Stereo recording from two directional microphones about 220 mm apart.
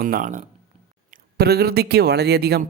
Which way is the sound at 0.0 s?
40° right (ahead or behind).